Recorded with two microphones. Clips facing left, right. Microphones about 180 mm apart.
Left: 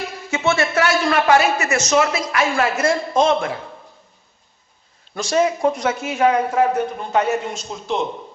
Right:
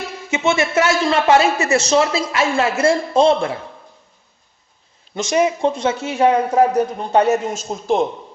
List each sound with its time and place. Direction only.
0.3 s a man's voice: 20° right (ahead or behind)
5.1 s a man's voice: 20° right (ahead or behind)
6.6 s a man's voice: 35° right (ahead or behind)